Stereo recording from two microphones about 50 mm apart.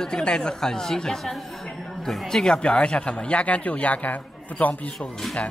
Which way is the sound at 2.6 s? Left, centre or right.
Left.